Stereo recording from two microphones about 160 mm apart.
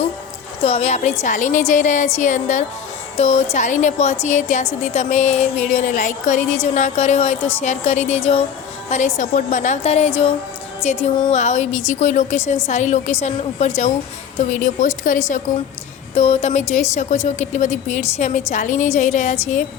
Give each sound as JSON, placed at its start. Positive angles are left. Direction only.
{"t": 0.6, "sound": "a woman's voice", "side_deg": 40}
{"t": 11.3, "sound": "a woman's voice", "side_deg": 45}